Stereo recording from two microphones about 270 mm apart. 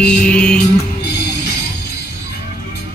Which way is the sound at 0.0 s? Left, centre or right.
Centre.